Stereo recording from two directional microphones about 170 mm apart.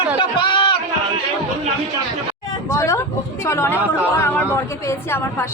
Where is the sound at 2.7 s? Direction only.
15° left (ahead or behind).